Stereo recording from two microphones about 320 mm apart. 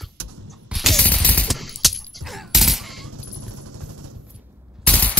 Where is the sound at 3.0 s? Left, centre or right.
Right.